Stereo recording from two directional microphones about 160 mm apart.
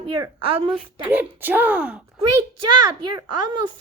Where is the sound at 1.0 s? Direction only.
10° right (ahead or behind).